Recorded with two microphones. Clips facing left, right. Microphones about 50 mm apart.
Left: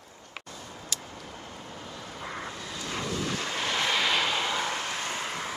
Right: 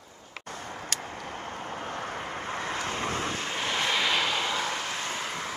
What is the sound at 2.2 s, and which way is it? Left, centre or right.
Vehicle, right.